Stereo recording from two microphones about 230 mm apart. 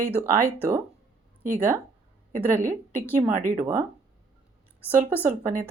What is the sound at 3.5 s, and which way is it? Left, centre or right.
Speech, centre.